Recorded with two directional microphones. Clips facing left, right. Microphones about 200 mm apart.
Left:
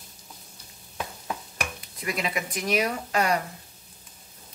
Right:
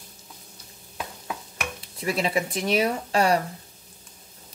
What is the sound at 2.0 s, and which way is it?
Speech, 30° right (ahead or behind).